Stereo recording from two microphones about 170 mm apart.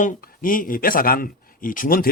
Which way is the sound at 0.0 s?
55° left (ahead or behind).